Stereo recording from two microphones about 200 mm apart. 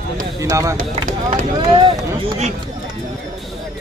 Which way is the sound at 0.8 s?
35° right (ahead or behind).